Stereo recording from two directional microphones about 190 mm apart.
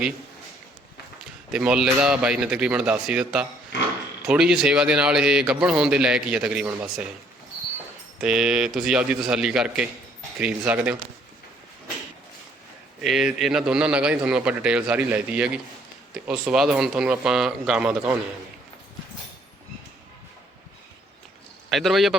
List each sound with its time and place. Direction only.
1.2 s a man's voice: 5° right (ahead or behind)
8.2 s a man's voice: 5° right (ahead or behind)
13.0 s a man's voice: centre (ahead or behind)
21.7 s a man's voice: centre (ahead or behind)